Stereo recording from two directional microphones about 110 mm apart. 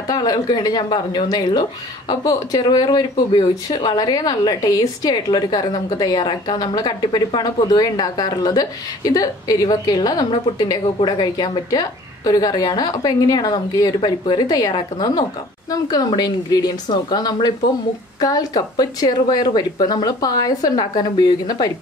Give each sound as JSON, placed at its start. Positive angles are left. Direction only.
{"t": 0.0, "sound": "speech", "side_deg": 35}